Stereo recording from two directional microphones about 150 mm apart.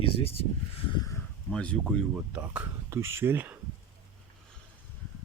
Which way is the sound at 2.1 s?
10° right (ahead or behind).